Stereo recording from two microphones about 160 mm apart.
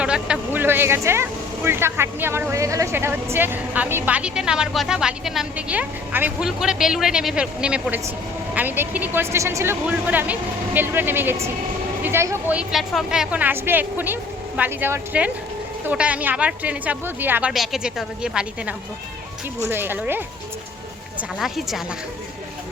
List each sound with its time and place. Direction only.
0.0 s speech: 5° right (ahead or behind)
17.5 s a woman's voice: centre (ahead or behind)
21.2 s a woman's voice: centre (ahead or behind)